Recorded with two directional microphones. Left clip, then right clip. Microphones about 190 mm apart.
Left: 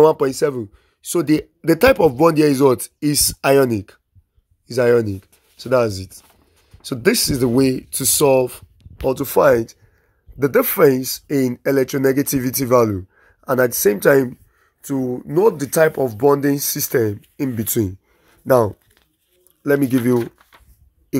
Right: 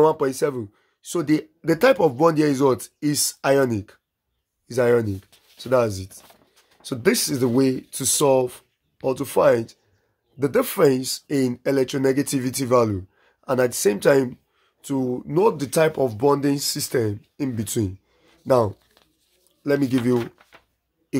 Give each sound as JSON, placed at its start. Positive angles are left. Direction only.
{"t": 0.0, "sound": "speech", "side_deg": 35}
{"t": 18.4, "sound": "speech", "side_deg": 30}
{"t": 20.2, "sound": "a sound", "side_deg": 5}